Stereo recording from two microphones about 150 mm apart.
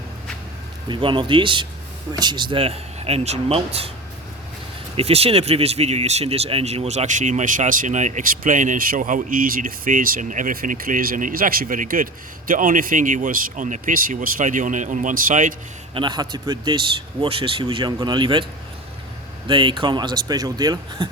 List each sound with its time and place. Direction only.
0.9 s speech: 35° right (ahead or behind)
4.9 s speech: 40° right (ahead or behind); by 15.5 s 60° right (ahead or behind)
16.0 s speech: 30° right (ahead or behind)
19.5 s speech: 35° right (ahead or behind)